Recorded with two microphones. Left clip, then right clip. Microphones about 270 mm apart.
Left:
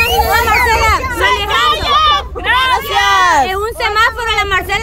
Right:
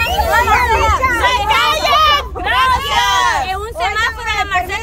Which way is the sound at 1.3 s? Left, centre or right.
Centre.